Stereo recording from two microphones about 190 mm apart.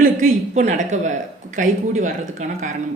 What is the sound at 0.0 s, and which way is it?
A woman's voice, 40° right (ahead or behind).